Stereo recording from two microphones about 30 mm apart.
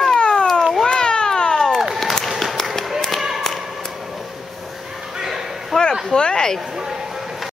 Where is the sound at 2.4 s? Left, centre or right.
Centre.